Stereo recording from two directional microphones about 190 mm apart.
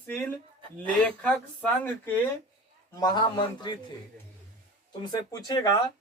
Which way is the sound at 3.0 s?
20° left (ahead or behind).